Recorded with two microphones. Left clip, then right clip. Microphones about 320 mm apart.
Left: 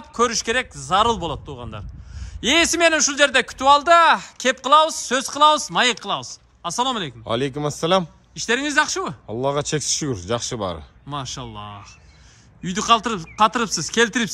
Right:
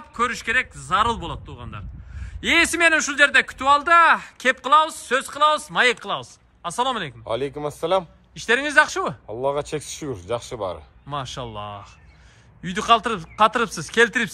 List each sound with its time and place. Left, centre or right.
0.1 s a man's voice: centre
7.2 s speech: left
8.4 s a man's voice: centre
9.4 s speech: left
11.1 s a man's voice: centre